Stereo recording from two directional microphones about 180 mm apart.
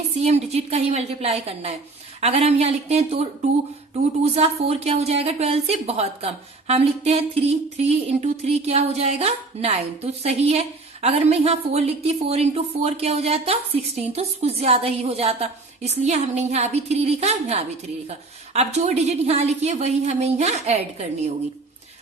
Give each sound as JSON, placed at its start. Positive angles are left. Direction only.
{"t": 0.2, "sound": "a woman's voice", "side_deg": -35}